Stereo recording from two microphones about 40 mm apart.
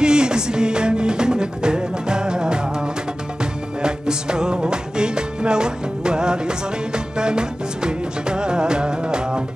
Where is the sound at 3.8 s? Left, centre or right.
Centre.